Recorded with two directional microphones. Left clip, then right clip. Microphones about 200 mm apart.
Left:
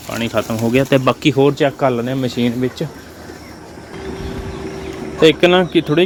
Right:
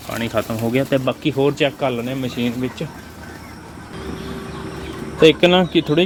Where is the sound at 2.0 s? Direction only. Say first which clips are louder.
Left 4 dB; 30° left (ahead or behind).